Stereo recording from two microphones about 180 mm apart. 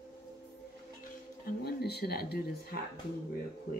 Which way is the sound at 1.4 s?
60° left (ahead or behind).